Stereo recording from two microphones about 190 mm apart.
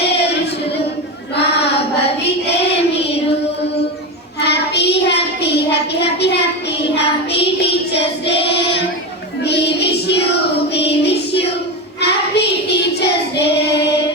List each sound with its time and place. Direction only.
1.4 s child singing: 60° left (ahead or behind)
4.4 s child singing: 60° left (ahead or behind)
9.4 s child singing: 60° left (ahead or behind)
10.8 s music: 60° left (ahead or behind)
12.0 s child singing: 60° left (ahead or behind)